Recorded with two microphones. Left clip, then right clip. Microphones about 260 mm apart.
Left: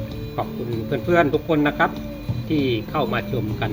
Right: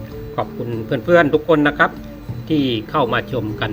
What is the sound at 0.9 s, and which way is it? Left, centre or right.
Speech, right.